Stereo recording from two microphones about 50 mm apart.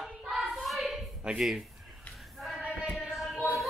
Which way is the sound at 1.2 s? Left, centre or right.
Centre.